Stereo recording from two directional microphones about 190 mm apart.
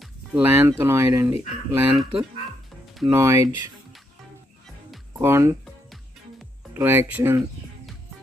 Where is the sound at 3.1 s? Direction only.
15° right (ahead or behind).